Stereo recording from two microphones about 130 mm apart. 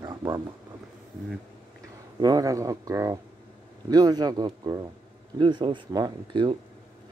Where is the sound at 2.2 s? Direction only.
30° right (ahead or behind).